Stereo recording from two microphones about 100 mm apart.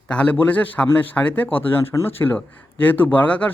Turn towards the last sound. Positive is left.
turn(degrees=15)  # may be behind; listen again after turning